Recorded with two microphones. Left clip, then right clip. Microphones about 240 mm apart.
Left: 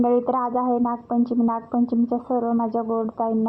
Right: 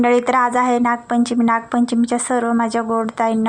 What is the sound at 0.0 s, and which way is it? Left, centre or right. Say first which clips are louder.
Speech: right 6 dB; right.